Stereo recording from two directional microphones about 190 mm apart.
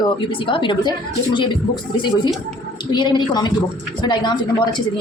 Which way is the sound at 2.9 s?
25° left (ahead or behind).